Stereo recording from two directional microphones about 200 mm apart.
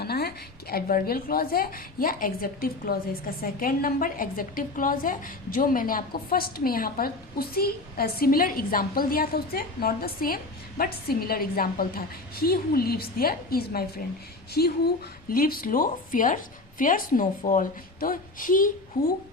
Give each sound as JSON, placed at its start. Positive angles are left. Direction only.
{"t": 0.0, "sound": "speech", "side_deg": 50}